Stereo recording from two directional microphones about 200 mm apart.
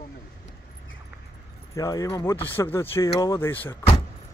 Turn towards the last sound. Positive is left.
turn(degrees=10)  # may be behind; listen again after turning